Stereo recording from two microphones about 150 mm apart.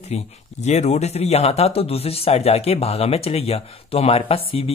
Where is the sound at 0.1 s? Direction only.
50° left (ahead or behind).